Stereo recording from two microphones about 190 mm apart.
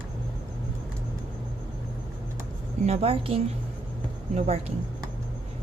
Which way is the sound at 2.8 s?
30° right (ahead or behind).